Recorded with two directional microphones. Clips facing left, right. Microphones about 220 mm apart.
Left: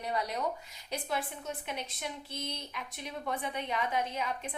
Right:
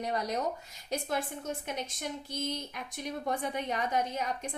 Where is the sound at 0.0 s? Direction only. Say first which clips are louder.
Right 2 dB; 45° right (ahead or behind).